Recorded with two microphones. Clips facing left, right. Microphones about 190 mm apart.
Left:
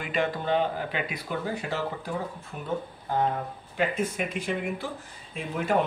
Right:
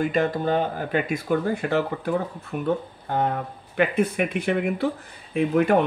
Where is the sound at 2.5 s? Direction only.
70° right (ahead or behind).